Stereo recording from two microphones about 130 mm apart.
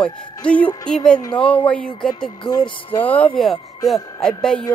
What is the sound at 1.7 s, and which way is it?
Music, 5° left (ahead or behind).